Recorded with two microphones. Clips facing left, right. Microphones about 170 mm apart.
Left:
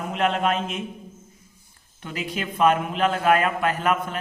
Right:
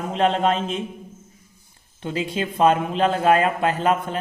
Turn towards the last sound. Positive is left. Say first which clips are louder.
# right 3 dB
turn(degrees=-30)  # may be behind; listen again after turning